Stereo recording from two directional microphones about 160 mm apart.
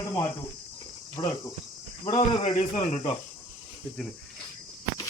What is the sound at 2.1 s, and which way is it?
Speech, 45° left (ahead or behind).